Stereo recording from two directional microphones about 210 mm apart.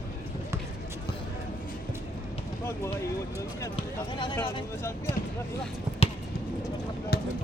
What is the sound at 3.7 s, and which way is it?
Speech, 25° left (ahead or behind).